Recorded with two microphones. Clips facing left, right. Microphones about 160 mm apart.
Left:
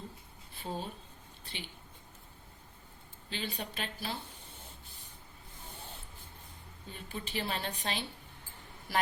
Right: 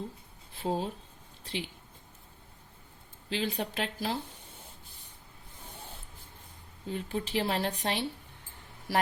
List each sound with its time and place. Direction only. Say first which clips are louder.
0.6 s speech: right 8 dB; 90° right
3.2 s speech: right 7 dB; 90° right
6.8 s speech: right 9 dB; 90° right; by 8.0 s 75° right (ahead or behind)